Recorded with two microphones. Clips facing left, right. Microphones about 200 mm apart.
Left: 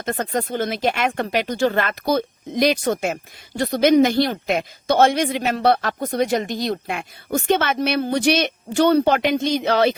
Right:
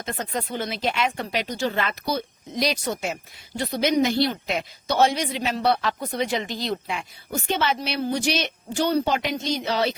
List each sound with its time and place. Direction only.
0.0 s speech: 55° left (ahead or behind)